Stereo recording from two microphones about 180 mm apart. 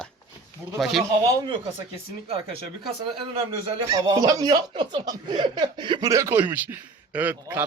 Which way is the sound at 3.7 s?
20° right (ahead or behind).